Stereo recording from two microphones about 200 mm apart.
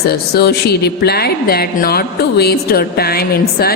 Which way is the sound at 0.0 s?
50° left (ahead or behind).